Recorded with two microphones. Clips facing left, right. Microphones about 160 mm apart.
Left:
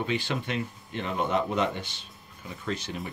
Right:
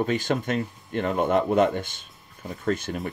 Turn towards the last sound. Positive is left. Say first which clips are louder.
# right 6 dB
turn(degrees=-50)  # may be behind; listen again after turning